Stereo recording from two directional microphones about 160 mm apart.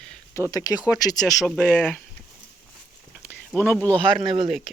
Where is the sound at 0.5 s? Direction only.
25° left (ahead or behind).